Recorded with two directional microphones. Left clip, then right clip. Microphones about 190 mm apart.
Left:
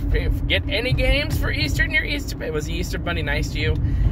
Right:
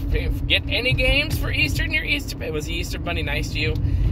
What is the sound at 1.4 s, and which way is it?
Speech, 15° left (ahead or behind).